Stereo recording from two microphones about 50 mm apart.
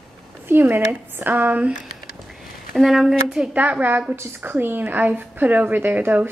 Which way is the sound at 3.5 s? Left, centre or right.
Right.